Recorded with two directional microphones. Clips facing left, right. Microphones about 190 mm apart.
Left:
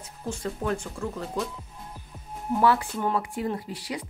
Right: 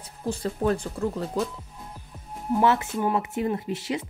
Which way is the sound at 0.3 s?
35° right (ahead or behind).